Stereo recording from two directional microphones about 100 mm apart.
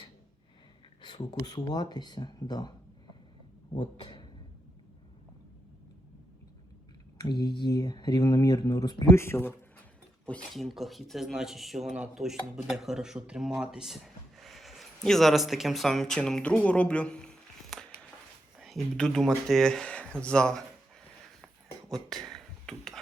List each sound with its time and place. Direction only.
1.0 s speech: 45° left (ahead or behind)
3.8 s speech: 50° left (ahead or behind)
7.2 s speech: 45° left (ahead or behind)
9.1 s speech: 25° left (ahead or behind)
10.5 s speech: centre (ahead or behind)
22.1 s a sound: 5° left (ahead or behind)